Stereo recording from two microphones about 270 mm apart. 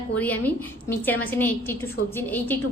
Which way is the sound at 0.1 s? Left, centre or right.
Centre.